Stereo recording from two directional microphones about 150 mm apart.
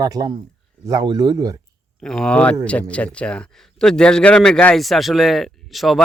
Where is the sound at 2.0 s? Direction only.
5° left (ahead or behind).